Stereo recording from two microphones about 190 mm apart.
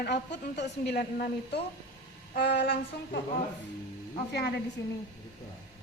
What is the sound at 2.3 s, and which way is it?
Speech, 60° left (ahead or behind).